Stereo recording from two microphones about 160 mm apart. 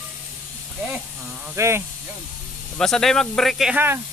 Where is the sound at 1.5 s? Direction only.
15° right (ahead or behind).